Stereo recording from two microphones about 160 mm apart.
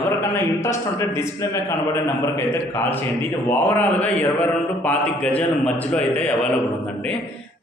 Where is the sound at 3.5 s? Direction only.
10° left (ahead or behind).